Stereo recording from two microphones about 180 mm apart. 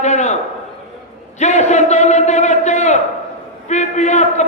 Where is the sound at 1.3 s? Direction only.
40° left (ahead or behind).